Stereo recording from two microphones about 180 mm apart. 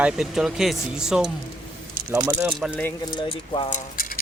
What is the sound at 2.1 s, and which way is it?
Speech, 15° right (ahead or behind).